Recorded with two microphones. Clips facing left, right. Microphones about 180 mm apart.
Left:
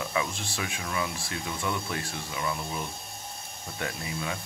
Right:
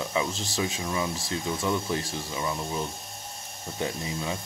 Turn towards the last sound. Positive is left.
turn(degrees=-25)  # may be behind; listen again after turning